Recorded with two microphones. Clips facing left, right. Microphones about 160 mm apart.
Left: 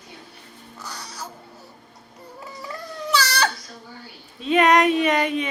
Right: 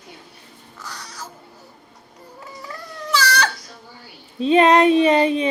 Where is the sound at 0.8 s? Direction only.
Centre (ahead or behind).